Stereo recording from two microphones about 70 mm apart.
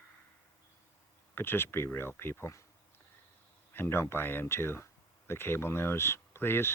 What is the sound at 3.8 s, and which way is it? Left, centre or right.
Speech, left.